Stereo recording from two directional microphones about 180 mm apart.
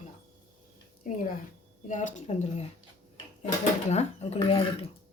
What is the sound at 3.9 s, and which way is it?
Speech, 35° left (ahead or behind).